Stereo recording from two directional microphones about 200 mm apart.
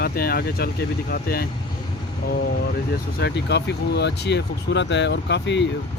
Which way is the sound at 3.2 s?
55° left (ahead or behind).